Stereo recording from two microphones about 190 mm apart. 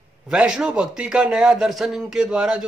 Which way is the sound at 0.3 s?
5° right (ahead or behind).